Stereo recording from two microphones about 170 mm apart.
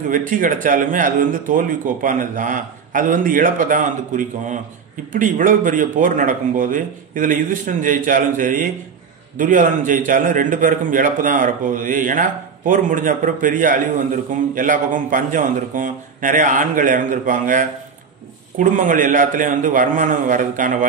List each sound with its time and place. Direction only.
0.3 s a man's voice: 50° right (ahead or behind)